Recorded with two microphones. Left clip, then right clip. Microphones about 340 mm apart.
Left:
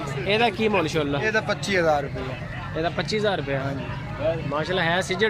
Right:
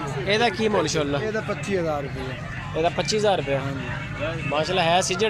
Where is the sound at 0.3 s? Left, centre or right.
Centre.